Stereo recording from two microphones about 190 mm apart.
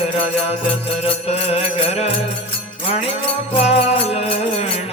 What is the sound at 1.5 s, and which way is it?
Music, 35° left (ahead or behind).